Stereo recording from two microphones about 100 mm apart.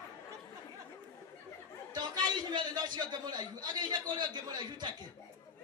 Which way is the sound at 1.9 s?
45° right (ahead or behind).